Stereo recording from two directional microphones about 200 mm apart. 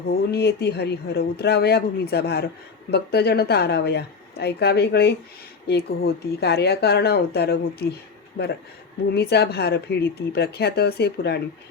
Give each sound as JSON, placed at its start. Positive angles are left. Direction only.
{"t": 0.1, "sound": "speech", "side_deg": 55}
{"t": 8.4, "sound": "speech", "side_deg": 40}
{"t": 9.0, "sound": "speech", "side_deg": 55}